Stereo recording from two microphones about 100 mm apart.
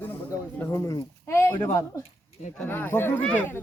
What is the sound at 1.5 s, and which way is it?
Speech, 45° left (ahead or behind).